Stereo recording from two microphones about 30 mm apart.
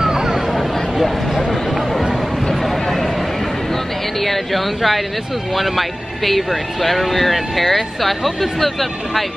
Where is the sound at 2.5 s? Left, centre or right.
Centre.